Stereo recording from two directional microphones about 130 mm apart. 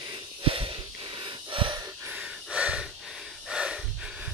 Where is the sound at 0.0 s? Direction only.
40° right (ahead or behind).